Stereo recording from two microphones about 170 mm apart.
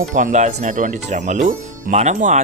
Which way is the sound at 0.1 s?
45° right (ahead or behind).